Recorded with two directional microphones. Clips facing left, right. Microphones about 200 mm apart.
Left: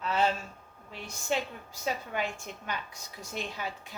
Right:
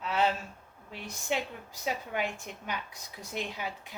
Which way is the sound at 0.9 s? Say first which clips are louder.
Left 1 dB; 15° right (ahead or behind).